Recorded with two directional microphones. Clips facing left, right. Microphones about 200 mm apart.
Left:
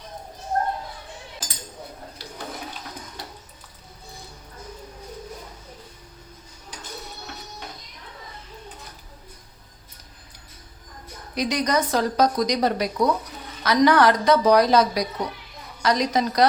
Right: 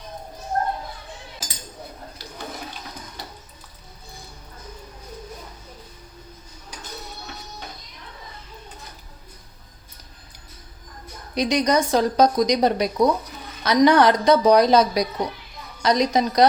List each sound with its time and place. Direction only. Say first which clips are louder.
11.3 s a woman's voice: right 3 dB; 20° right (ahead or behind)